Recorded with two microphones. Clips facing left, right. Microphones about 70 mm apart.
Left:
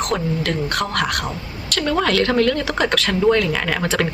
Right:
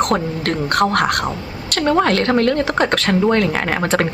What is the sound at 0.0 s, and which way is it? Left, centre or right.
Speech, right.